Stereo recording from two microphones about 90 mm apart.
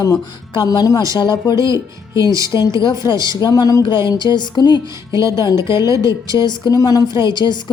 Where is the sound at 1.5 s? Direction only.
35° right (ahead or behind).